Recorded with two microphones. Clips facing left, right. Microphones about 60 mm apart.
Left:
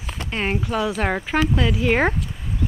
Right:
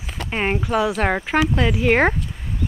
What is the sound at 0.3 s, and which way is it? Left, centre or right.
Speech, centre.